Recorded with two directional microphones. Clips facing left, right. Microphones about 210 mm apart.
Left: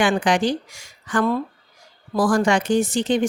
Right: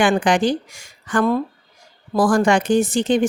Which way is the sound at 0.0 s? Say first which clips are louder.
Right 2 dB; 50° right (ahead or behind).